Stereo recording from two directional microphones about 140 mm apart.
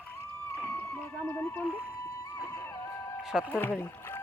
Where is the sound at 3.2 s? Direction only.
5° right (ahead or behind).